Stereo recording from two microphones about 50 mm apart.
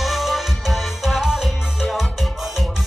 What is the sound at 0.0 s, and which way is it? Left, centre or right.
Music, centre.